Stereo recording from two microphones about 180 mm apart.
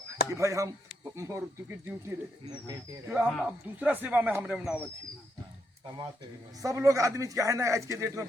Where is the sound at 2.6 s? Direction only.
15° right (ahead or behind).